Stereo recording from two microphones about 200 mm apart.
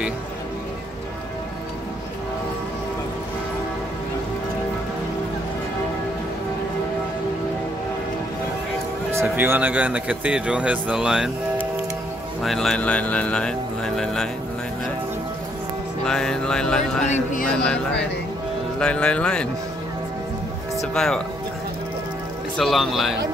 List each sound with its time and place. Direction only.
9.1 s a man's voice: 10° right (ahead or behind)
12.4 s speech: centre (ahead or behind)
16.1 s speech: 5° left (ahead or behind)
17.0 s speech: 35° left (ahead or behind)
18.8 s speech: 5° left (ahead or behind)
20.9 s speech: 5° left (ahead or behind)
22.6 s speech: centre (ahead or behind)